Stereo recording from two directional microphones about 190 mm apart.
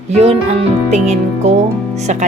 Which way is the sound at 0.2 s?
35° right (ahead or behind).